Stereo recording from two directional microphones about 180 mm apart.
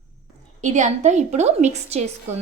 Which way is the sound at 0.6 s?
40° right (ahead or behind).